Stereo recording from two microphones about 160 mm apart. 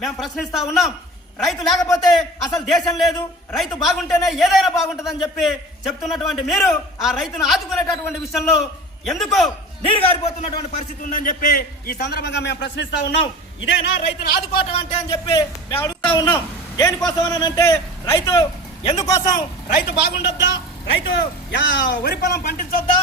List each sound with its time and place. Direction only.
0.0 s a man's voice: centre (ahead or behind)
9.9 s a man's voice: 40° left (ahead or behind)
11.1 s a man's voice: 60° left (ahead or behind); by 14.4 s 90° left
14.6 s a man's voice: 40° left (ahead or behind)
15.7 s a sound: 15° left (ahead or behind)
16.1 s a man's voice: 20° left (ahead or behind)
18.3 s a man's voice: 35° left (ahead or behind)
18.9 s a man's voice: 20° left (ahead or behind)
19.6 s a man's voice: 80° left; by 22.8 s 60° left (ahead or behind)